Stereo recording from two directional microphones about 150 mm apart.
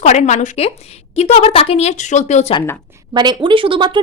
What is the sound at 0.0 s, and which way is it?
A woman's voice, 50° left (ahead or behind).